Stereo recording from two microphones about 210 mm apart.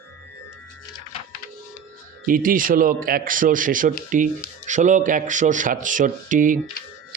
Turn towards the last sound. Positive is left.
turn(degrees=-40)  # may be behind; listen again after turning